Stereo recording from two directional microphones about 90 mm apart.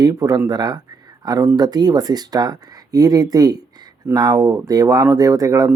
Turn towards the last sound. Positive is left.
turn(degrees=-40)  # may be behind; listen again after turning